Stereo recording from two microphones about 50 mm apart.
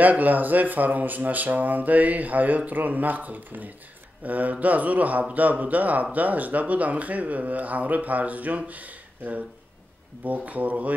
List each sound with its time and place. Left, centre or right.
0.0 s speech: right